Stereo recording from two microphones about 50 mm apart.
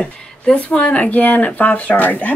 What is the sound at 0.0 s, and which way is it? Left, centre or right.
Speech, left.